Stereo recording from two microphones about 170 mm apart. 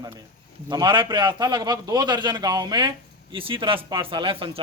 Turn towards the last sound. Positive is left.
turn(degrees=-30)  # may be behind; listen again after turning